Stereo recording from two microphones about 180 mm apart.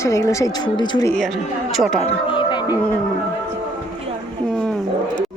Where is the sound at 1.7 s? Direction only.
Centre (ahead or behind).